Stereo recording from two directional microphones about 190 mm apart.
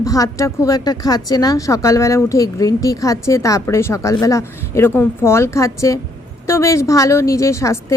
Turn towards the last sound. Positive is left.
turn(degrees=15)  # may be behind; listen again after turning